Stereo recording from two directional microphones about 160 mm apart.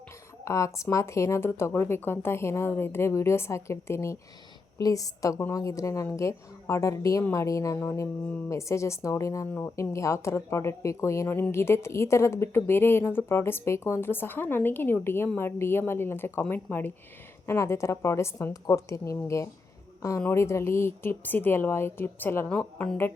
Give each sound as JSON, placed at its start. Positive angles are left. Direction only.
{"t": 0.4, "sound": "a woman's voice", "side_deg": 20}